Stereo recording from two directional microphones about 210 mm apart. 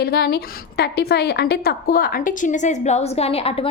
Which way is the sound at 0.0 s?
45° left (ahead or behind).